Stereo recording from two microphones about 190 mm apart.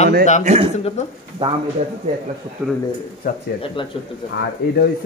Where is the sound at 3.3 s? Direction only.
50° left (ahead or behind).